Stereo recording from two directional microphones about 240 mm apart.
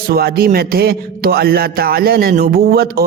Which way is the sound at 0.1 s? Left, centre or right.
Right.